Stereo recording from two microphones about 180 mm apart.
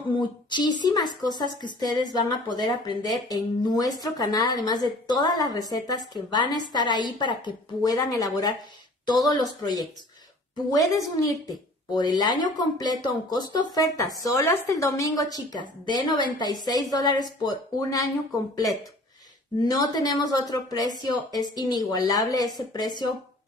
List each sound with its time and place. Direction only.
0.1 s speech: 25° left (ahead or behind)
19.6 s speech: 20° left (ahead or behind)